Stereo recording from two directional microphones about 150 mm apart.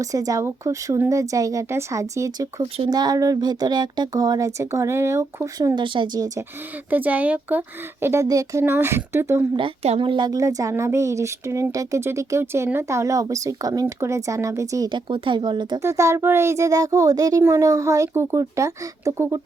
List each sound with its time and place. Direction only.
0.0 s a woman's voice: 25° right (ahead or behind)
6.9 s speech: 10° right (ahead or behind)
9.6 s a woman's voice: 40° right (ahead or behind)
15.8 s a woman's voice: 20° right (ahead or behind)